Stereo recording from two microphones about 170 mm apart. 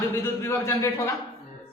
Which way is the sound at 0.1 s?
15° left (ahead or behind).